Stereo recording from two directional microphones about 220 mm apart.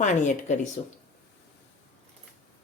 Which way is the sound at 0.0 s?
35° left (ahead or behind).